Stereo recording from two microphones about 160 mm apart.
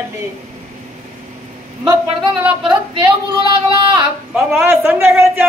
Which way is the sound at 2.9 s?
30° right (ahead or behind).